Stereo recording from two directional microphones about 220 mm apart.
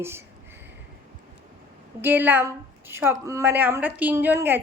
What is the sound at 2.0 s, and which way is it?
A woman's voice, 10° right (ahead or behind).